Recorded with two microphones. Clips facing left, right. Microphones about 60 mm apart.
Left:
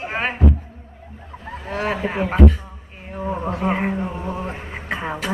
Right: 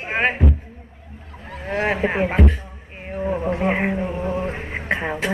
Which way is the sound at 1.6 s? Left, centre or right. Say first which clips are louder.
Right 3 dB; right.